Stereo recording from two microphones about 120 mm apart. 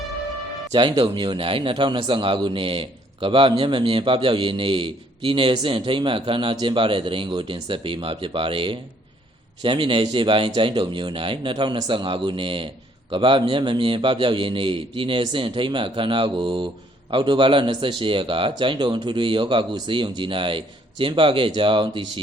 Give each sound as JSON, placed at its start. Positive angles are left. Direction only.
{"t": 0.7, "sound": "a man's voice", "side_deg": -35}